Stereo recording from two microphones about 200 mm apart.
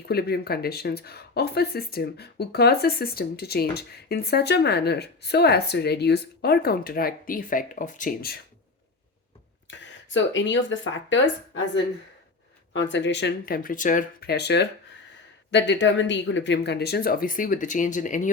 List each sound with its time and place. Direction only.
0.0 s speech: 50° left (ahead or behind)
9.6 s speech: 65° left (ahead or behind); by 18.3 s 40° left (ahead or behind)